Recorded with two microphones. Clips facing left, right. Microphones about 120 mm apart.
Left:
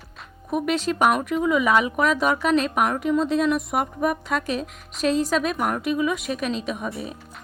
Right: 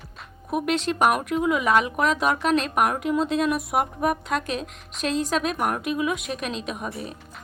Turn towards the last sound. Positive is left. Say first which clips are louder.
# left 2 dB
turn(degrees=0)  # may be behind; listen again after turning